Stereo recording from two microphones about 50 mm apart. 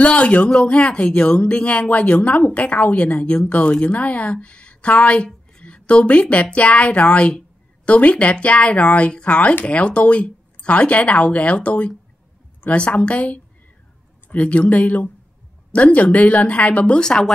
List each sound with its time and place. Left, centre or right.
0.0 s speech: left